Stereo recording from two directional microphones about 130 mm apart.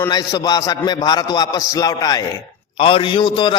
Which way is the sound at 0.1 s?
30° left (ahead or behind).